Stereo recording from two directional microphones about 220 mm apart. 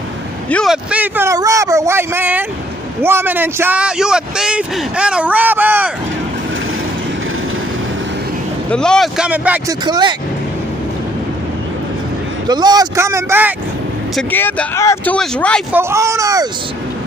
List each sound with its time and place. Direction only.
0.5 s speech: centre (ahead or behind)
8.6 s speech: 5° left (ahead or behind)
9.8 s speech: 20° right (ahead or behind)
12.4 s speech: 20° right (ahead or behind)
14.1 s speech: 5° left (ahead or behind)
15.7 s speech: 10° right (ahead or behind)